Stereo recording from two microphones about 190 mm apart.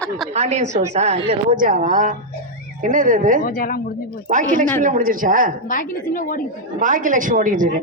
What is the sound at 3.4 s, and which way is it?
Speech, 50° left (ahead or behind).